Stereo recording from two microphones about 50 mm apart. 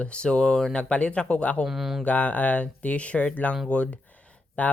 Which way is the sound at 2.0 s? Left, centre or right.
Left.